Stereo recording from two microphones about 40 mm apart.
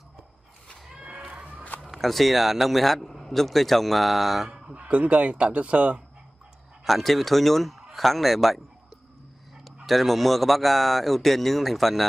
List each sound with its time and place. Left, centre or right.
1.0 s a sound: right
1.8 s a man's voice: centre
4.5 s a sound: centre
4.7 s a man's voice: right
6.8 s a man's voice: centre
9.7 s a man's voice: centre